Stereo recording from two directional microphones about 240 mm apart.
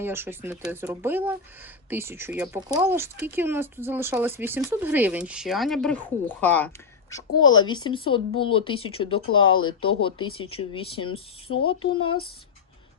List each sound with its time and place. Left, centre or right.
0.0 s speech: centre
7.3 s speech: left
7.6 s speech: centre
9.4 s speech: left
9.8 s speech: left